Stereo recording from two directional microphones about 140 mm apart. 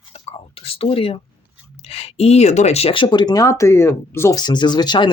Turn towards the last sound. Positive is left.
turn(degrees=30)  # may be behind; listen again after turning